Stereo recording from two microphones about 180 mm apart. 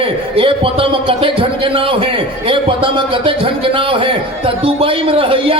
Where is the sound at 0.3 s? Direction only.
30° right (ahead or behind).